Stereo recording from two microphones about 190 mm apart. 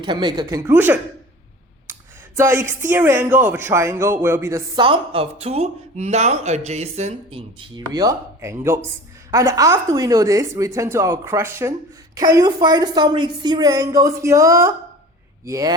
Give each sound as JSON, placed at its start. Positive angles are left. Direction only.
{"t": 0.0, "sound": "a woman's voice", "side_deg": -25}
{"t": 0.7, "sound": "a woman's voice", "side_deg": -10}